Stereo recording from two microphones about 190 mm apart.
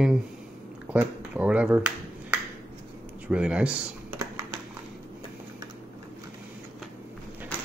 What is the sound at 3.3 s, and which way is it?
Speech, 5° right (ahead or behind).